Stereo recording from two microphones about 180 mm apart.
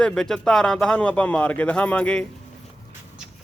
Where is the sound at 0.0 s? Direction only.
5° left (ahead or behind).